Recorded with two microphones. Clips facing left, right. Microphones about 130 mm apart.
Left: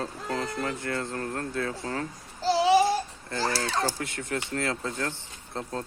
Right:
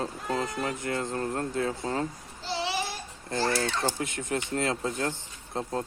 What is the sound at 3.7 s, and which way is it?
Speech, 35° left (ahead or behind).